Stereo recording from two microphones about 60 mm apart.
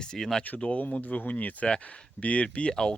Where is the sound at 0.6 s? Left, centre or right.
Left.